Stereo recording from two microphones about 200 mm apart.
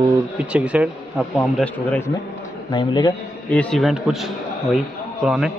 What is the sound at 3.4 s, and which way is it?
A man's voice, 5° left (ahead or behind).